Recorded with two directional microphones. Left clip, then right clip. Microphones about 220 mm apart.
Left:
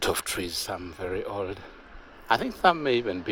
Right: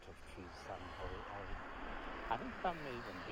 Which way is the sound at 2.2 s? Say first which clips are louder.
Left 19 dB; 60° left (ahead or behind).